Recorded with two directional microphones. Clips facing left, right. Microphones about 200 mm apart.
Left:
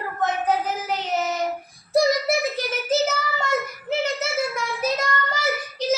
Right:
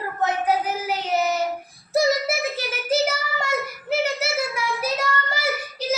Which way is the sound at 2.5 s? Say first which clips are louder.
Even; 10° right (ahead or behind).